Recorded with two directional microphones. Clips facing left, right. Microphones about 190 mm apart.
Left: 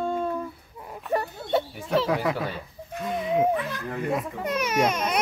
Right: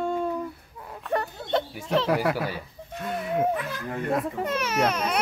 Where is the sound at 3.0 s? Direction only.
Centre (ahead or behind).